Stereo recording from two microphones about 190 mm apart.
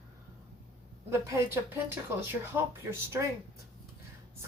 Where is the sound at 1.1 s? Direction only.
10° right (ahead or behind).